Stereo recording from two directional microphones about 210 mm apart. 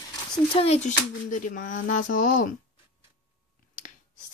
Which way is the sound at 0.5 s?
30° left (ahead or behind).